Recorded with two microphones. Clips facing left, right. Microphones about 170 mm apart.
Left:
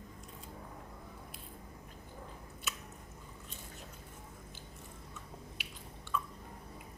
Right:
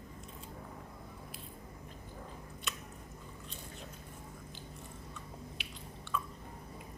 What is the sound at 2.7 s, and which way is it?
Chewing, 5° left (ahead or behind).